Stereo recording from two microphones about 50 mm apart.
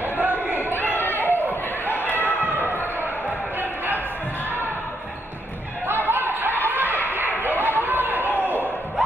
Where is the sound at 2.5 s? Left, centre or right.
Right.